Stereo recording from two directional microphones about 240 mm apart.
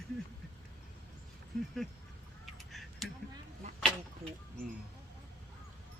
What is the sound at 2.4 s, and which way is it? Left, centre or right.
Duck, centre.